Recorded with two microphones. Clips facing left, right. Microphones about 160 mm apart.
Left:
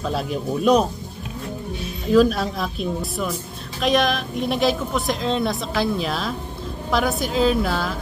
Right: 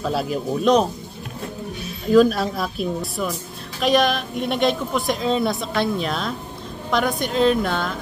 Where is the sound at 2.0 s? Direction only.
Centre (ahead or behind).